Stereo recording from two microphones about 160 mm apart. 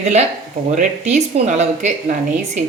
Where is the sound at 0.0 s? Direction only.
45° right (ahead or behind).